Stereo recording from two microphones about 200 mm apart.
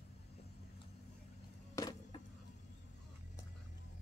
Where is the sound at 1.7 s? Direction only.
20° left (ahead or behind).